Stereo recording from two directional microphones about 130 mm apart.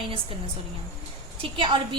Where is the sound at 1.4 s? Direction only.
40° right (ahead or behind).